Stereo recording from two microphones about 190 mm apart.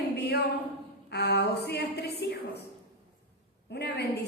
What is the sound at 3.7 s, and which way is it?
Speech, 60° left (ahead or behind).